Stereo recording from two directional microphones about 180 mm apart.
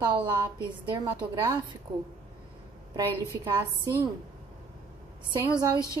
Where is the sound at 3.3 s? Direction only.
20° right (ahead or behind).